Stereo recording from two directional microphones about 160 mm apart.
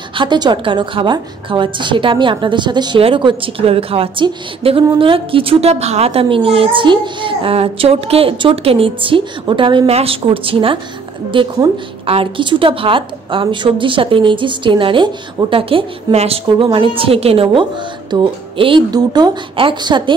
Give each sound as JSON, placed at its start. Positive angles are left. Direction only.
{"t": 0.1, "sound": "a woman's voice", "side_deg": -30}